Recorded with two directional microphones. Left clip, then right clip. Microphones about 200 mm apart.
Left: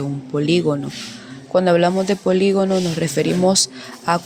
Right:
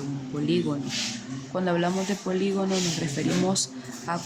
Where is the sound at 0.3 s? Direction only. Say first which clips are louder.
Left 9 dB; 40° left (ahead or behind).